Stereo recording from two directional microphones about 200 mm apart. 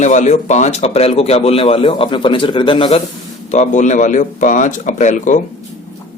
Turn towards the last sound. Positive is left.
turn(degrees=40)  # may be behind; listen again after turning